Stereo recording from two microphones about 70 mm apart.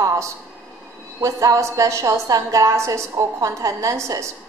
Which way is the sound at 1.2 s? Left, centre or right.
Right.